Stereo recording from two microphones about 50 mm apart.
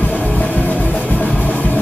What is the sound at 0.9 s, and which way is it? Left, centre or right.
Music, left.